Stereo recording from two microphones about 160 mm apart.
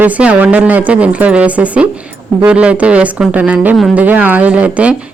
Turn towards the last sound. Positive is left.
turn(degrees=-10)  # may be behind; listen again after turning